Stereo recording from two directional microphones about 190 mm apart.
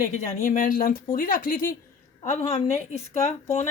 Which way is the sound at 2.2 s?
35° left (ahead or behind).